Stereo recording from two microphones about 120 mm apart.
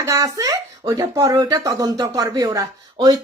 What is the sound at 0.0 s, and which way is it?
Speech, 25° right (ahead or behind).